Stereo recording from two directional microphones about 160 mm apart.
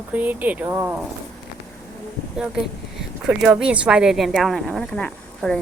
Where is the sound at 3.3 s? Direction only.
5° right (ahead or behind).